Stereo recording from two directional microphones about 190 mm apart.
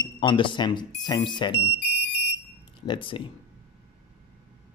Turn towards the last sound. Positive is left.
turn(degrees=25)  # may be behind; listen again after turning